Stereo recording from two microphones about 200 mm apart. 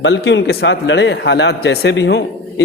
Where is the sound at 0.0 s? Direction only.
65° left (ahead or behind).